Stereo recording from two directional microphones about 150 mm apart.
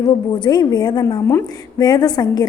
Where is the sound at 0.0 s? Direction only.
30° left (ahead or behind).